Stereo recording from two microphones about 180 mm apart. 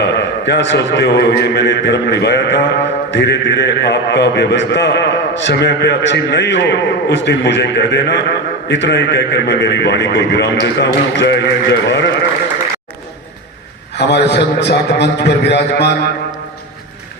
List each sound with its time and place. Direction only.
0.0 s a man's voice: 70° left (ahead or behind)
14.0 s a man's voice: 70° left (ahead or behind)